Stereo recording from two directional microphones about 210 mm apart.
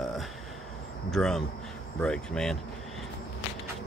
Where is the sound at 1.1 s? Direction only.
Centre (ahead or behind).